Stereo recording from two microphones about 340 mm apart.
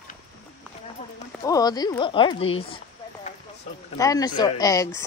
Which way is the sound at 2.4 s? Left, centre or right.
Left.